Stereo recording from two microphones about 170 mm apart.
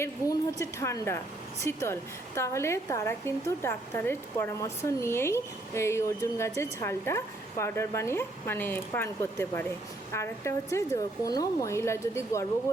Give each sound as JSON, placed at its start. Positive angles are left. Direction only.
{"t": 0.0, "sound": "a woman's voice", "side_deg": 15}